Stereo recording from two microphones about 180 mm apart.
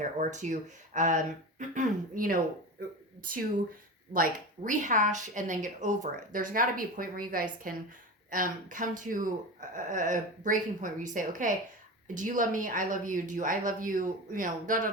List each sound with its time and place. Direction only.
0.2 s speech: 40° right (ahead or behind)
4.1 s speech: 50° right (ahead or behind)